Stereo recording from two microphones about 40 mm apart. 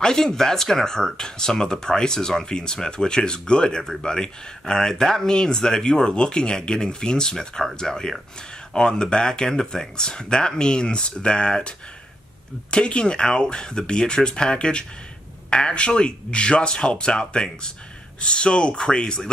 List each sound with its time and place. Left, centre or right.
0.0 s speech: centre
12.7 s speech: left